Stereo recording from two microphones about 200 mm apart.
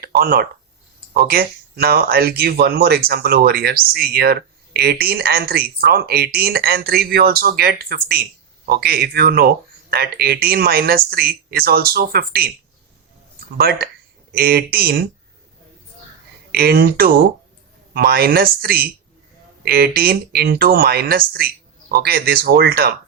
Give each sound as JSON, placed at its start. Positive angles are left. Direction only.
{"t": 0.0, "sound": "a sound", "side_deg": -50}
{"t": 1.1, "sound": "speech", "side_deg": -50}
{"t": 13.6, "sound": "speech", "side_deg": -50}
{"t": 16.5, "sound": "speech", "side_deg": -50}